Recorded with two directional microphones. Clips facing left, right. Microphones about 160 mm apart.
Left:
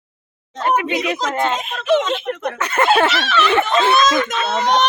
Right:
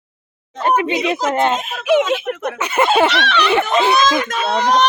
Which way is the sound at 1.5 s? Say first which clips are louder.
Right 2 dB; centre (ahead or behind).